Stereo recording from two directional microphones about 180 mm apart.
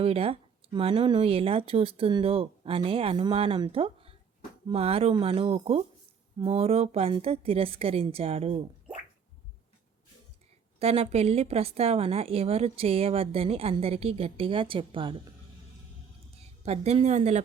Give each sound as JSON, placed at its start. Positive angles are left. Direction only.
{"t": 0.0, "sound": "a woman's voice", "side_deg": -30}
{"t": 10.8, "sound": "a woman's voice", "side_deg": -35}
{"t": 16.6, "sound": "a woman's voice", "side_deg": -35}